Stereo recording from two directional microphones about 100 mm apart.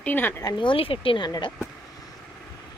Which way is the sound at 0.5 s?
60° left (ahead or behind).